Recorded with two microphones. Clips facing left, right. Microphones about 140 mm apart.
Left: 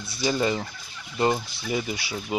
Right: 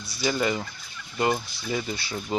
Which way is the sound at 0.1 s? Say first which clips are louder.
Left 1 dB; 20° left (ahead or behind).